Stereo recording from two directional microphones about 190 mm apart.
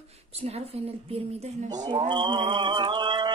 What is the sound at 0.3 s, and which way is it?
A woman's voice, 35° right (ahead or behind).